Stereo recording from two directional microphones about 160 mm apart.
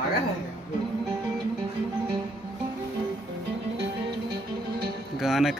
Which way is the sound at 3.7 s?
90° right.